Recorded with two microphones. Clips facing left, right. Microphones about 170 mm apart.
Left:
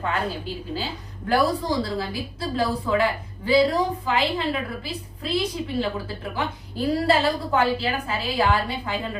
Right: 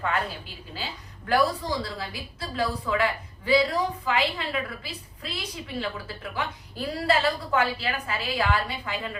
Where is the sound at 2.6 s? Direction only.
30° left (ahead or behind).